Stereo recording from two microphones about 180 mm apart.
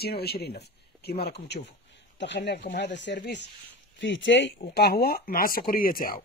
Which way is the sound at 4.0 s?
90° left.